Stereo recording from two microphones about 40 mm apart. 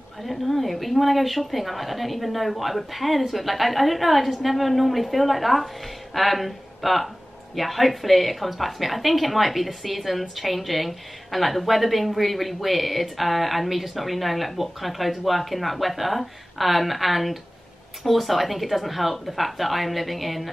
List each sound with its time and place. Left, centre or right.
0.2 s a woman's voice: centre